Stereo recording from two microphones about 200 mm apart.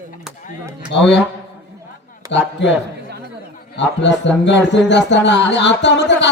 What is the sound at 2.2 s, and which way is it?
Speech, 15° right (ahead or behind).